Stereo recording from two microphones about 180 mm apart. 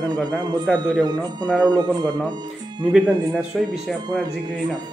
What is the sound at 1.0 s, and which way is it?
Speech, 20° right (ahead or behind).